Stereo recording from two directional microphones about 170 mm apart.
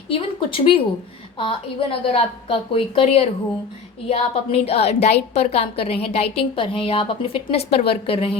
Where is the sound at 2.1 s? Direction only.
35° left (ahead or behind).